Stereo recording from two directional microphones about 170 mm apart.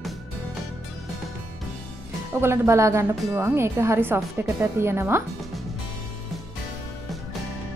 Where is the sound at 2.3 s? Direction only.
15° right (ahead or behind).